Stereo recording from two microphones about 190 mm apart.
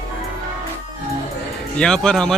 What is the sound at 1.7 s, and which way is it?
Speech, 5° left (ahead or behind).